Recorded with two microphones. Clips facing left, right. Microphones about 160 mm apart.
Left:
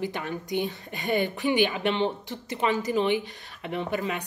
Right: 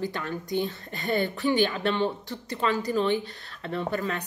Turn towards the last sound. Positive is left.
turn(degrees=15)  # may be behind; listen again after turning